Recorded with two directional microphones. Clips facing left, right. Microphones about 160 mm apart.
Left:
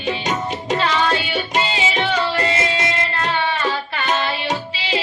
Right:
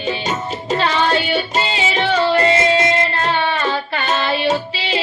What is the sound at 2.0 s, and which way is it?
Music, 30° right (ahead or behind).